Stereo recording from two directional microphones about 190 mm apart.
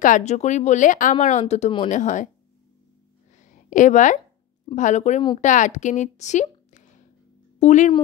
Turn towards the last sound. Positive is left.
turn(degrees=40)  # may be behind; listen again after turning